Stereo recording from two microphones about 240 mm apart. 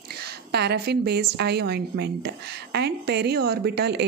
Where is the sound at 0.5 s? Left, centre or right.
Right.